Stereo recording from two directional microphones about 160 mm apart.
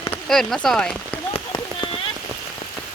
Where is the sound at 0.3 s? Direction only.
Centre (ahead or behind).